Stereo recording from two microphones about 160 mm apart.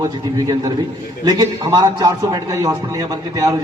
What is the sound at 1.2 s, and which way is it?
A man's voice, 25° right (ahead or behind).